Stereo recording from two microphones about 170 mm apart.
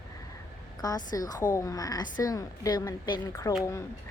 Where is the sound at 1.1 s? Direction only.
20° left (ahead or behind).